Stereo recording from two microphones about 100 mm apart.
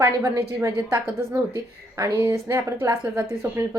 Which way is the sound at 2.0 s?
30° right (ahead or behind).